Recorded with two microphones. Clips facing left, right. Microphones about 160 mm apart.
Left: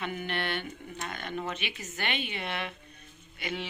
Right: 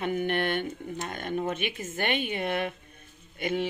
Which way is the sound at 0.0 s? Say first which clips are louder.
Right 7 dB; 50° right (ahead or behind).